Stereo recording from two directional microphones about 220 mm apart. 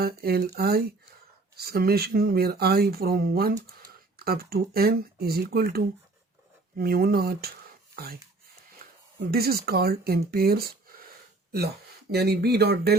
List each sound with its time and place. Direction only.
0.0 s speech: 45° right (ahead or behind)
9.2 s speech: 45° right (ahead or behind)
12.1 s speech: 45° right (ahead or behind)